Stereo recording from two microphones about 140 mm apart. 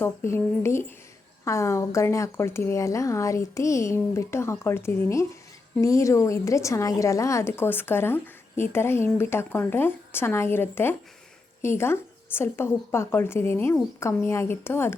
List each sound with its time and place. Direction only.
0.0 s speech: 15° left (ahead or behind)